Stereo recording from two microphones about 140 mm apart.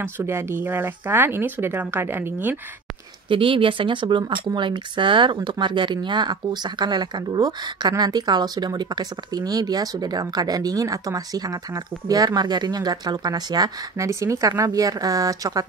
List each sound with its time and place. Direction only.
0.0 s speech: 20° right (ahead or behind)
3.3 s speech: 40° right (ahead or behind)